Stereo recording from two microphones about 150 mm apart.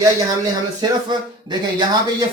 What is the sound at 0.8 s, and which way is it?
Speech, 30° right (ahead or behind).